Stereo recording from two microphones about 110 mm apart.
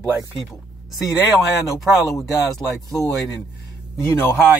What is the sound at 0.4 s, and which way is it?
Speech, centre (ahead or behind).